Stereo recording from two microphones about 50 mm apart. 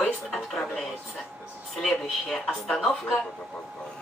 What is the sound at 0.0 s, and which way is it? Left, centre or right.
Television, centre.